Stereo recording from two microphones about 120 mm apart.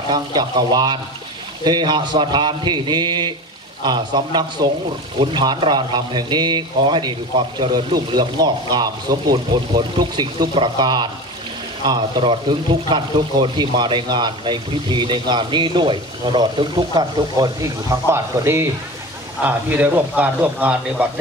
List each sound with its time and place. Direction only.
0.1 s speech: 35° right (ahead or behind); by 21.1 s 15° right (ahead or behind)